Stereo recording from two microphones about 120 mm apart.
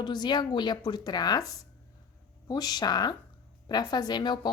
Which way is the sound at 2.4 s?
35° left (ahead or behind).